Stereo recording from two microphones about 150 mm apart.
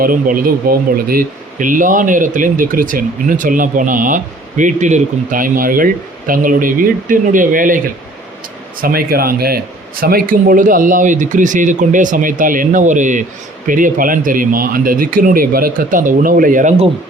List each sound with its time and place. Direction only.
0.0 s speech: 70° right (ahead or behind)
8.8 s speech: 80° right; by 16.7 s 65° right (ahead or behind)